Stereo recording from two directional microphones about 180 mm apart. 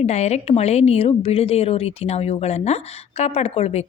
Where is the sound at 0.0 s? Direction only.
40° left (ahead or behind).